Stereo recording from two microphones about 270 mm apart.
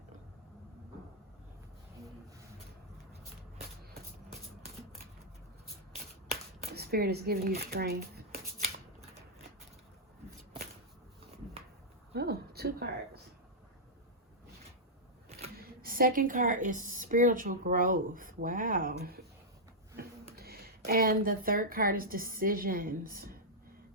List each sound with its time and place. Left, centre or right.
6.7 s speech: right
12.1 s a sound: right
15.5 s a woman's voice: right
20.3 s speech: right